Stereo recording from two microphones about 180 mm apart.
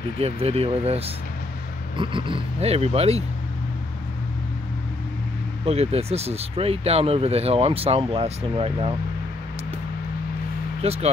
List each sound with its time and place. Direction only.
0.2 s speech: 35° right (ahead or behind)
5.7 s speech: 35° right (ahead or behind)
10.8 s speech: 35° right (ahead or behind)